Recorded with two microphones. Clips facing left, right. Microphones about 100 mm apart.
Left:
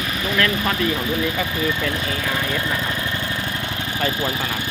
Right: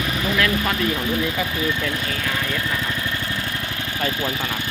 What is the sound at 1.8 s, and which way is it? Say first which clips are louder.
Speech: left 2 dB; 5° left (ahead or behind).